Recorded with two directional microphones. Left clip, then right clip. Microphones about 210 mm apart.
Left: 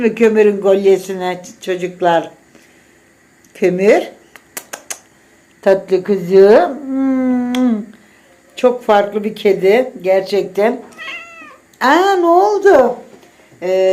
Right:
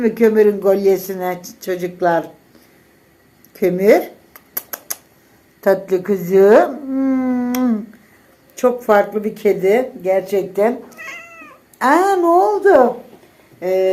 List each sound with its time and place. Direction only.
0.0 s a man's voice: 5° left (ahead or behind)
3.5 s a man's voice: centre (ahead or behind)
4.5 s a sound: centre (ahead or behind)
5.5 s speech: 5° left (ahead or behind)
13.6 s a man's voice: 5° left (ahead or behind)